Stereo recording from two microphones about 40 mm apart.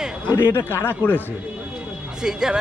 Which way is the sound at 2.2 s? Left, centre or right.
Centre.